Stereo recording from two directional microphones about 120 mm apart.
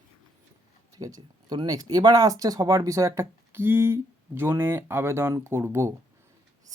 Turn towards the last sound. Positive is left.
turn(degrees=-20)  # may be behind; listen again after turning